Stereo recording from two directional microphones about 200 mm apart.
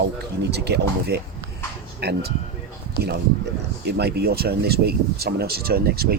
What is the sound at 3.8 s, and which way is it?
Speech, 55° right (ahead or behind).